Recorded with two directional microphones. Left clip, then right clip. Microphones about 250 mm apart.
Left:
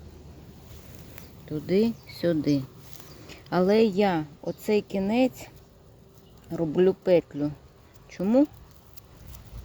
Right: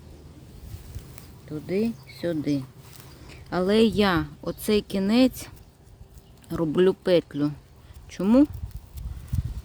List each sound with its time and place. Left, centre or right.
1.5 s a woman's voice: centre
6.5 s a woman's voice: centre